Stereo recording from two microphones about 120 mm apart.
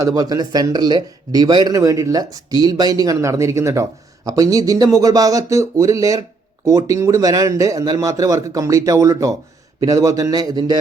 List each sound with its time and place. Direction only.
0.0 s a man's voice: 30° right (ahead or behind)